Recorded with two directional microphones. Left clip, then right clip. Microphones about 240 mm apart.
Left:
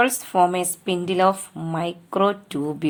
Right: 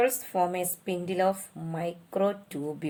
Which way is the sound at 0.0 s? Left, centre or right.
Left.